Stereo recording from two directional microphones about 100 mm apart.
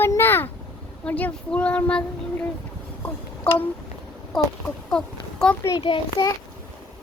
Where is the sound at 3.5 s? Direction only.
10° left (ahead or behind).